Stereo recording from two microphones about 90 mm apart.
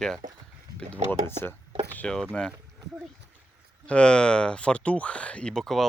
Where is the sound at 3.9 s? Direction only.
10° left (ahead or behind).